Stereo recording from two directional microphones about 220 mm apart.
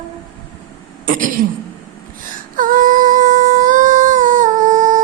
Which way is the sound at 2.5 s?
40° right (ahead or behind).